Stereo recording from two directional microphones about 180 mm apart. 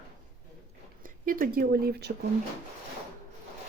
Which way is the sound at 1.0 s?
50° right (ahead or behind).